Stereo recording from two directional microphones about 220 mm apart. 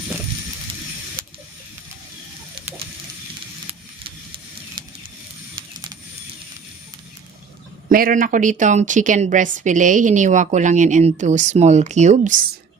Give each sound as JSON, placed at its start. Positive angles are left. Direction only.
{"t": 7.9, "sound": "a woman's voice", "side_deg": -40}